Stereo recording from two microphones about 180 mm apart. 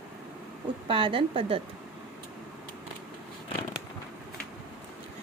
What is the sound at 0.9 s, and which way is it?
Speech, 30° right (ahead or behind).